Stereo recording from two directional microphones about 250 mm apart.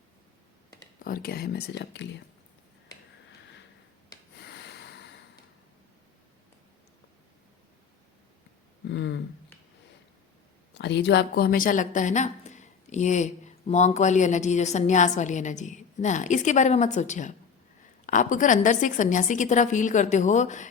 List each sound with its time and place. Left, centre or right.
1.0 s a woman's voice: left
4.4 s snort: left
8.9 s a sound: left
10.8 s a woman's voice: left